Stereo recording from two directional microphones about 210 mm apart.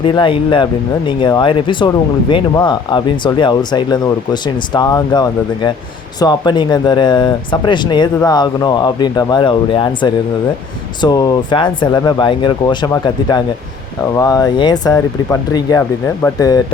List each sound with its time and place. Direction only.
0.0 s speech: 25° left (ahead or behind)